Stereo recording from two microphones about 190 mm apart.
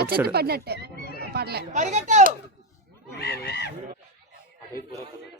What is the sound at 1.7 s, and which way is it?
Speech, 40° right (ahead or behind).